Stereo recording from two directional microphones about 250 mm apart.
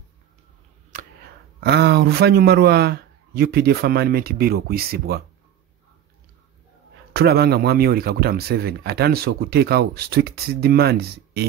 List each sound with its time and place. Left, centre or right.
1.6 s speech: right
7.2 s speech: right